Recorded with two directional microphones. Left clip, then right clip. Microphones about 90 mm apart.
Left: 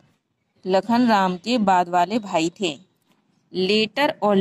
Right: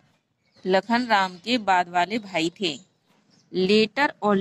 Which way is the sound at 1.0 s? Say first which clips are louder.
Left 3 dB; 25° left (ahead or behind).